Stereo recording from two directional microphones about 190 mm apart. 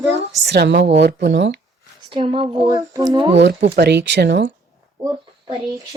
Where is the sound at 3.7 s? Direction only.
65° right (ahead or behind).